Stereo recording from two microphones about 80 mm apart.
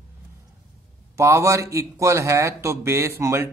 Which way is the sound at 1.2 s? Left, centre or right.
Right.